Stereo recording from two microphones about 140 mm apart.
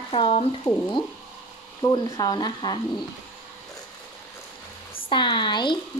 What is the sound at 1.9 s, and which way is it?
Speech, 30° left (ahead or behind).